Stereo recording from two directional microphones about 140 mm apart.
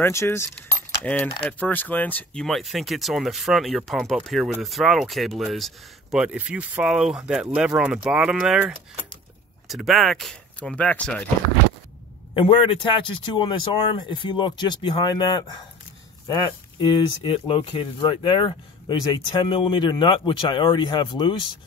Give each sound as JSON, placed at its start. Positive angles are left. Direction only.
{"t": 0.0, "sound": "keys jangling", "side_deg": 20}
{"t": 1.6, "sound": "speech", "side_deg": 10}
{"t": 12.4, "sound": "speech", "side_deg": 40}
{"t": 16.8, "sound": "speech", "side_deg": 35}